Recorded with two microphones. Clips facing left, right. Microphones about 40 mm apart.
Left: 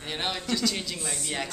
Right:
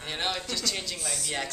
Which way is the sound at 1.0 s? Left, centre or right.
Left.